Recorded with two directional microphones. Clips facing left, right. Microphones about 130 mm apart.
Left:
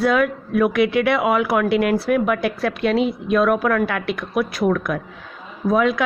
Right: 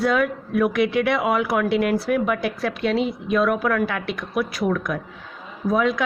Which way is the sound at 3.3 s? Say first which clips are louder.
Left 3 dB; 55° left (ahead or behind).